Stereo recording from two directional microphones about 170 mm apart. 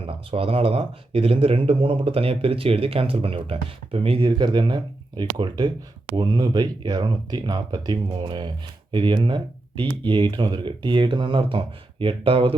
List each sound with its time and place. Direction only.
0.0 s speech: 35° right (ahead or behind)